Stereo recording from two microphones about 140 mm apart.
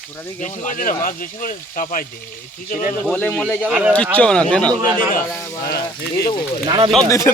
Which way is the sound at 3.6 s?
10° right (ahead or behind).